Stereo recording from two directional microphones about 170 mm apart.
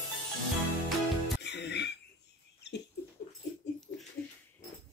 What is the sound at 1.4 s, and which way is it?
Music, 90° left.